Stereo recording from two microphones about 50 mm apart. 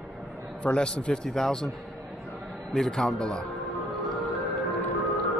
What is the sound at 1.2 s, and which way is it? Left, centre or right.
Speech, centre.